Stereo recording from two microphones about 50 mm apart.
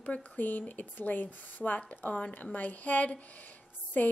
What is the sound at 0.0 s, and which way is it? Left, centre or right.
A woman's voice, left.